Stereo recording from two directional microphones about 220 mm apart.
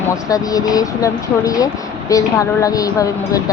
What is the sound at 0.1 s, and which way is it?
Speech, 15° left (ahead or behind).